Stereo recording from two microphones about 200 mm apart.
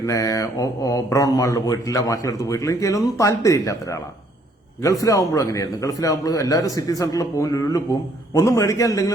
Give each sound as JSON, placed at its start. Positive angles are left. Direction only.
{"t": 0.0, "sound": "speech", "side_deg": 15}